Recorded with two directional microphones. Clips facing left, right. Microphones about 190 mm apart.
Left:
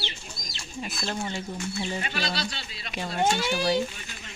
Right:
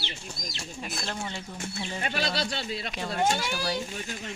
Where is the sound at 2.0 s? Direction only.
50° right (ahead or behind).